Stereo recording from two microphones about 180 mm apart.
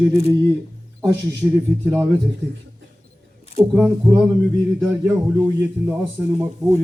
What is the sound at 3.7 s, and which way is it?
Speech, 5° right (ahead or behind).